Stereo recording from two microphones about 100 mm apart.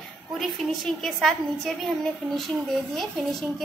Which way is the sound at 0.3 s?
Centre (ahead or behind).